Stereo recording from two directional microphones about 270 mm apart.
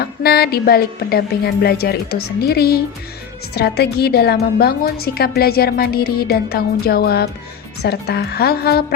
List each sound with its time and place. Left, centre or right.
0.0 s a woman's voice: left